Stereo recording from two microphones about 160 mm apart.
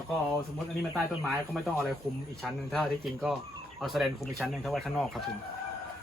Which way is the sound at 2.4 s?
Centre (ahead or behind).